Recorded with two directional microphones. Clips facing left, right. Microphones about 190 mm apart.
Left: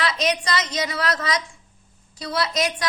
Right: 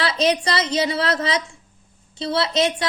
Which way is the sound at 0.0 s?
30° right (ahead or behind).